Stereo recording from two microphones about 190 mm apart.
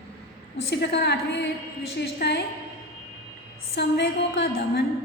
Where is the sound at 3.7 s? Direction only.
65° left (ahead or behind).